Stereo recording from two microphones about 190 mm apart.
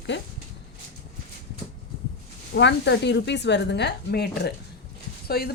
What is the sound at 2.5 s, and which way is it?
Speech, 65° left (ahead or behind).